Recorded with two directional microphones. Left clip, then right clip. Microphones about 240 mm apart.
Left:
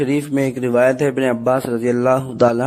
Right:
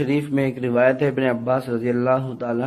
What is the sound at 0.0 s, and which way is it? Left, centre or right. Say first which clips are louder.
A man's voice: left 3 dB; left.